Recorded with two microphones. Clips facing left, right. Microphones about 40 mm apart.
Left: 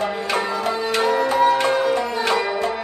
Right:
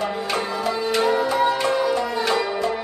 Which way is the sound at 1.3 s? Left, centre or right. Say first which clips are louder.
Left 3 dB; left.